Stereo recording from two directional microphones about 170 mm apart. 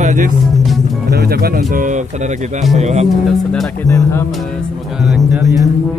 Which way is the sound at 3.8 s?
15° left (ahead or behind).